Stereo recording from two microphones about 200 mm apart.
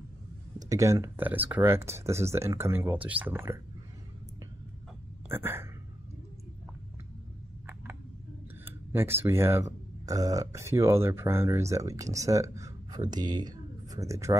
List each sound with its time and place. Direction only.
0.6 s speech: 15° right (ahead or behind)
5.3 s speech: 10° right (ahead or behind)
8.6 s speech: 10° right (ahead or behind)